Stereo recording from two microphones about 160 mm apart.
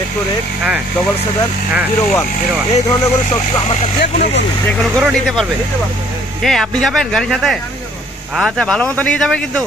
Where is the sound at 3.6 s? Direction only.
40° left (ahead or behind).